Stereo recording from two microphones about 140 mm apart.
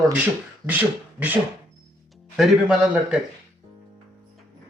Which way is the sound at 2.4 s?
5° right (ahead or behind).